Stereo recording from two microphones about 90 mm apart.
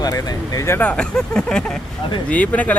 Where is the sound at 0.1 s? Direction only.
30° left (ahead or behind).